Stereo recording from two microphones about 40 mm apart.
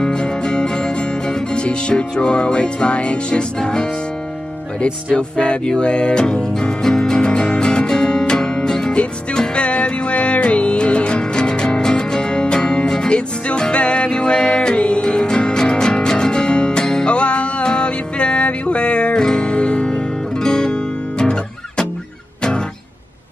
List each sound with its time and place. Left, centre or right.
0.0 s music: centre
5.1 s music: left
9.6 s music: left
13.5 s music: left